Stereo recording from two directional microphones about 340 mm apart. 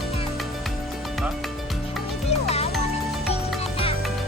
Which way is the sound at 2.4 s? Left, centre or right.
Centre.